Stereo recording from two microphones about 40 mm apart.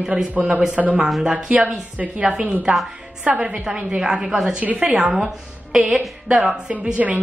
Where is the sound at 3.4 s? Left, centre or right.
Right.